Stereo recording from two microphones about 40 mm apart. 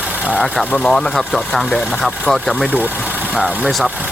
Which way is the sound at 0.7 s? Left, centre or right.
Left.